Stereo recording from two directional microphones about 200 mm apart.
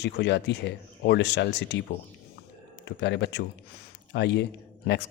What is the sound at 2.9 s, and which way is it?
Speech, 60° left (ahead or behind).